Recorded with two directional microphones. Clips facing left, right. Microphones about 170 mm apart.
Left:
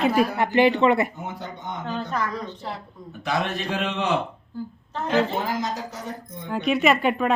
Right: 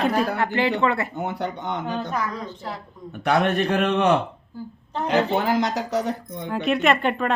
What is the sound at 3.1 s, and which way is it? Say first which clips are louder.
A man's voice: right 6 dB; 60° right (ahead or behind).